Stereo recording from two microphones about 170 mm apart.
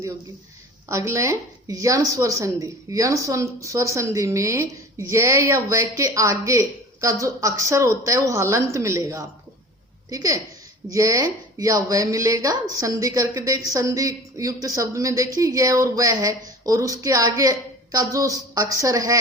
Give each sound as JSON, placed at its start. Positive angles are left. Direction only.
{"t": 0.9, "sound": "speech", "side_deg": -15}